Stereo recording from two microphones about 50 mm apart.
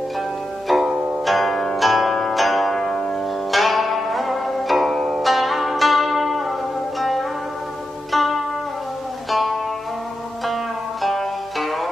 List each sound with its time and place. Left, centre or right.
1.2 s zither: centre
2.8 s music: centre
3.5 s music: centre
8.1 s zither: centre
9.3 s music: centre